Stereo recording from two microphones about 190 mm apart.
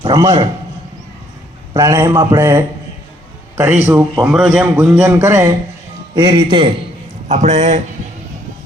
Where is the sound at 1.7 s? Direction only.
15° right (ahead or behind).